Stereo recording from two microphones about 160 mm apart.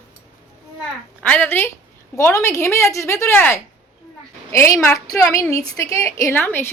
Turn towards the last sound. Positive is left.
turn(degrees=15)  # may be behind; listen again after turning